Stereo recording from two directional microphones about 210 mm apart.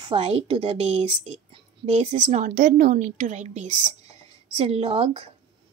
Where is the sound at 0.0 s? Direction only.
30° right (ahead or behind).